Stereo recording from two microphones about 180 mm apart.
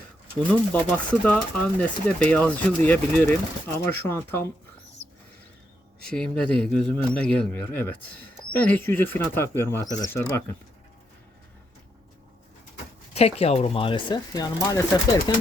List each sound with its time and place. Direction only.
0.4 s speech: 10° left (ahead or behind)
6.1 s speech: 5° left (ahead or behind)
13.1 s speech: 35° left (ahead or behind); by 15.2 s 20° left (ahead or behind)